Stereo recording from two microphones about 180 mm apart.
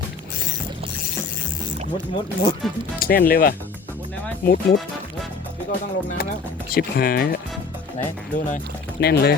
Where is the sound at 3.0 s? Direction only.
55° left (ahead or behind).